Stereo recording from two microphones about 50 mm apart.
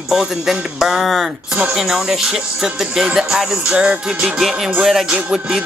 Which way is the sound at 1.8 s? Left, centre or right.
Centre.